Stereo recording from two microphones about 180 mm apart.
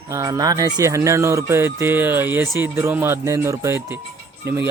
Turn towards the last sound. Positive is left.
turn(degrees=-15)  # may be behind; listen again after turning